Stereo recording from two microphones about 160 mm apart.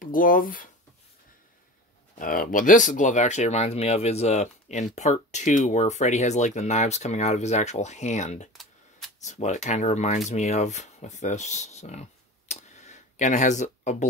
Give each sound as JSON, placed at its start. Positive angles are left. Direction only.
{"t": 0.0, "sound": "speech", "side_deg": 60}
{"t": 2.1, "sound": "speech", "side_deg": 60}